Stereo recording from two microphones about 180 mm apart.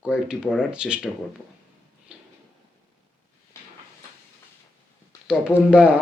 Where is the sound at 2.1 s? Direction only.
5° right (ahead or behind).